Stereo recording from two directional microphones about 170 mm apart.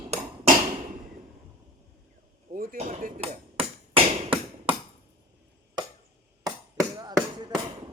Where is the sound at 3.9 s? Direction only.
35° right (ahead or behind).